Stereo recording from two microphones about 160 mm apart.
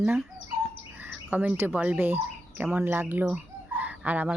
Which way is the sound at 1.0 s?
10° right (ahead or behind).